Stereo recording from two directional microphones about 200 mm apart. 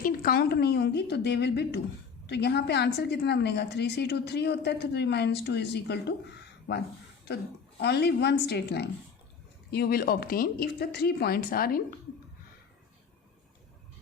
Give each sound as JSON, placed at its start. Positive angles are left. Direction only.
{"t": 0.0, "sound": "a woman's voice", "side_deg": 45}